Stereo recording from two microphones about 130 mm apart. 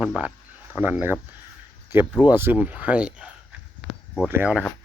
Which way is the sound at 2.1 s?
15° right (ahead or behind).